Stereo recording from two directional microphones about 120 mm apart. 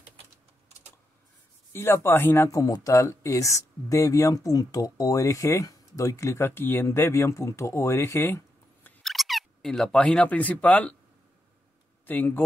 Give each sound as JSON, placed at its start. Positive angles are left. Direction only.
{"t": 1.7, "sound": "speech", "side_deg": 20}
{"t": 9.0, "sound": "speech", "side_deg": 0}
{"t": 12.1, "sound": "speech", "side_deg": 15}